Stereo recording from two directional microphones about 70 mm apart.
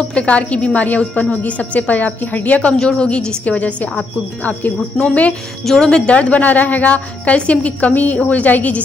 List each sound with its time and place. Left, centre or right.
0.1 s a woman's voice: centre
2.8 s a woman's voice: centre
5.0 s a woman's voice: centre